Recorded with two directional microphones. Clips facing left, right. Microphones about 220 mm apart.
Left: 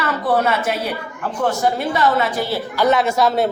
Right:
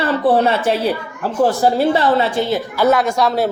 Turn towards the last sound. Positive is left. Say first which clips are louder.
# even
turn(degrees=0)  # may be behind; listen again after turning